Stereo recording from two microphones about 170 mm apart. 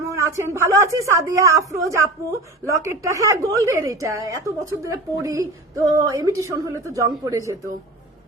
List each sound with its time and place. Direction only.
0.1 s a woman's voice: 15° right (ahead or behind)